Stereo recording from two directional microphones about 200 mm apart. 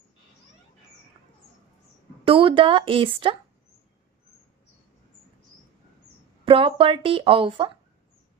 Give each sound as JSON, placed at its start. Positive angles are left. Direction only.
{"t": 2.2, "sound": "speech", "side_deg": -25}
{"t": 6.4, "sound": "speech", "side_deg": -25}